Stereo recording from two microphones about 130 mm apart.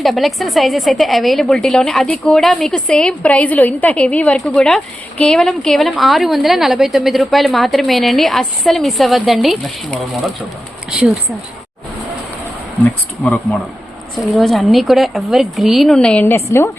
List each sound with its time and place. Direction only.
0.0 s a woman's voice: centre (ahead or behind)
13.2 s a woman's voice: 10° left (ahead or behind)
16.2 s a woman's voice: 20° left (ahead or behind)